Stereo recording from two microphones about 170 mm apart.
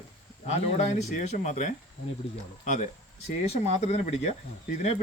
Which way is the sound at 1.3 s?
45° left (ahead or behind).